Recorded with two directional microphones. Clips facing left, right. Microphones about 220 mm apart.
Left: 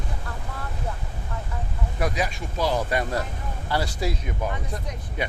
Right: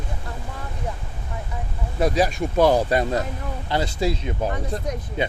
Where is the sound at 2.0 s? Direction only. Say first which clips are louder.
Right 7 dB; 30° right (ahead or behind).